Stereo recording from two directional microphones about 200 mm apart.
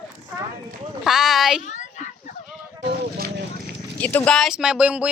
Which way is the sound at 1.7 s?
35° left (ahead or behind).